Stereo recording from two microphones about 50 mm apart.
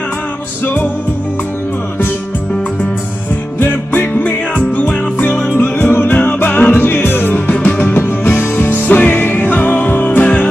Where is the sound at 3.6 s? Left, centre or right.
Left.